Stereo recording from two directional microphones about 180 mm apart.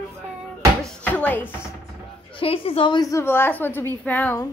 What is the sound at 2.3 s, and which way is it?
A woman's voice, 30° left (ahead or behind).